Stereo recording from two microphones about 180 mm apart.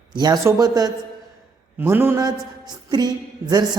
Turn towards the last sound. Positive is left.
turn(degrees=-20)  # may be behind; listen again after turning